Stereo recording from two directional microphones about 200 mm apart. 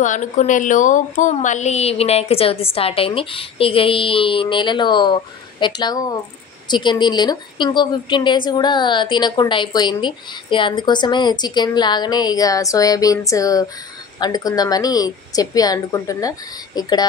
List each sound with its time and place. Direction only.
0.0 s a woman's voice: 40° left (ahead or behind); by 17.0 s 20° left (ahead or behind)